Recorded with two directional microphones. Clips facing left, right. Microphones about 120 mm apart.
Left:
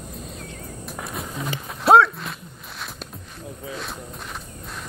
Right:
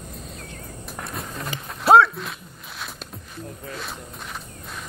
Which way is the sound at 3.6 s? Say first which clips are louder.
Left 3 dB; centre (ahead or behind).